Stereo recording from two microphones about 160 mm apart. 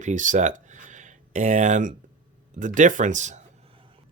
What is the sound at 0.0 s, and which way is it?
Speech, 50° right (ahead or behind).